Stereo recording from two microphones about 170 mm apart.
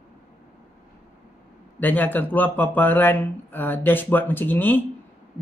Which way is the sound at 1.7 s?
10° left (ahead or behind).